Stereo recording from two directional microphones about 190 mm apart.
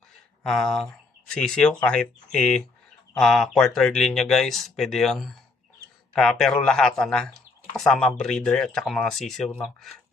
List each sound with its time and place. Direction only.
0.4 s speech: centre (ahead or behind)